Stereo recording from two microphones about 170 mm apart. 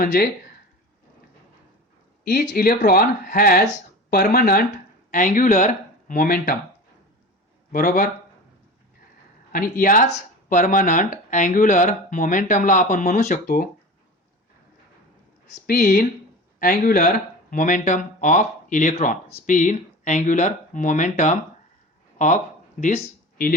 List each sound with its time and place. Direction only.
0.0 s speech: 65° left (ahead or behind)
2.2 s speech: 60° left (ahead or behind)
7.7 s speech: 55° left (ahead or behind)
9.5 s speech: 55° left (ahead or behind)
15.6 s speech: 60° left (ahead or behind)
22.8 s speech: 45° left (ahead or behind)